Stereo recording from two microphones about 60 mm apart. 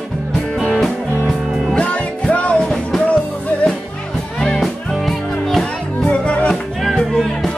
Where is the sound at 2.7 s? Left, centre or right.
Centre.